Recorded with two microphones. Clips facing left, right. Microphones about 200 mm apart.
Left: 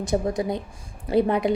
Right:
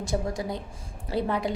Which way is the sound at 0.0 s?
20° left (ahead or behind).